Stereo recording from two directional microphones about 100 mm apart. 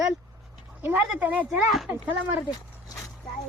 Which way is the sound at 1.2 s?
15° right (ahead or behind).